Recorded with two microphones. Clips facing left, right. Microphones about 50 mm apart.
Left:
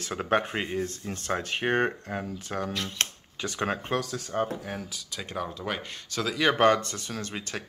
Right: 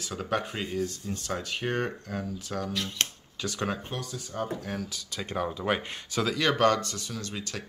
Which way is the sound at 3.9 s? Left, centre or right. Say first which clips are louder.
Left 7 dB; left.